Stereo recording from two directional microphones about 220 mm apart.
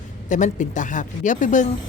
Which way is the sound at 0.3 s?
35° left (ahead or behind).